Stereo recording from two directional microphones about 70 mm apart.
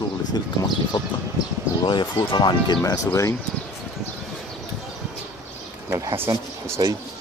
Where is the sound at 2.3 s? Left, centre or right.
Left.